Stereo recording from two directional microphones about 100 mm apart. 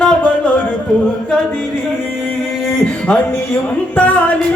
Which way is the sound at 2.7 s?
10° left (ahead or behind).